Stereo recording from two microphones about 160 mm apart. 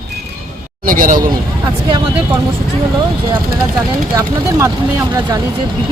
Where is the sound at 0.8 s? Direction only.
60° right (ahead or behind).